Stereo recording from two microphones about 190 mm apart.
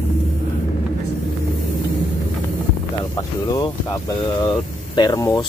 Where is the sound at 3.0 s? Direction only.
20° left (ahead or behind).